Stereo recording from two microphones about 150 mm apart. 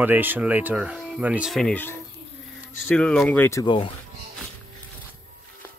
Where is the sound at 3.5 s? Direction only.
25° left (ahead or behind).